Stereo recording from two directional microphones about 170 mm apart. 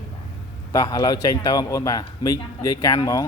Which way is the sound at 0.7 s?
20° left (ahead or behind).